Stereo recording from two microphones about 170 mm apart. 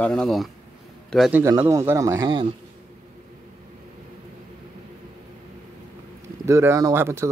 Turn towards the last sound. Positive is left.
turn(degrees=-15)  # may be behind; listen again after turning